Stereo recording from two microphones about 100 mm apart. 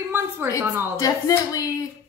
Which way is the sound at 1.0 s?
35° left (ahead or behind).